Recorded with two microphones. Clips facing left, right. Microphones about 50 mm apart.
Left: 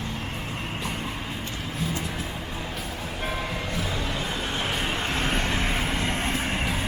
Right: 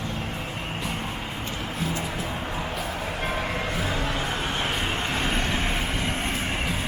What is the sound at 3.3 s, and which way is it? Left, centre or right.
Vehicle, right.